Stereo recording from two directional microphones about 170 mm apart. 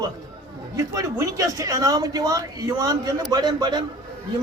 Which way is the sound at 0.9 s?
20° right (ahead or behind).